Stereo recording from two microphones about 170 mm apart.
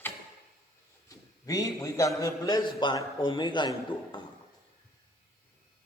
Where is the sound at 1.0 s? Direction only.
20° left (ahead or behind).